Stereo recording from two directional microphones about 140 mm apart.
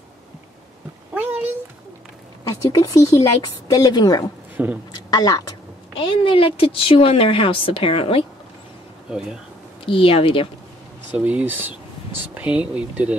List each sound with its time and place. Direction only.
1.1 s a sound: 10° right (ahead or behind)
2.4 s a woman's voice: 25° left (ahead or behind)
4.6 s speech: 15° right (ahead or behind)
4.9 s a sound: 30° left (ahead or behind)
5.9 s a woman's voice: 40° left (ahead or behind)
9.8 s a woman's voice: 40° left (ahead or behind)
11.1 s speech: 10° right (ahead or behind)